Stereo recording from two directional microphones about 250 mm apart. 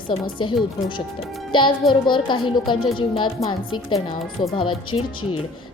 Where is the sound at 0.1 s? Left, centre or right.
Centre.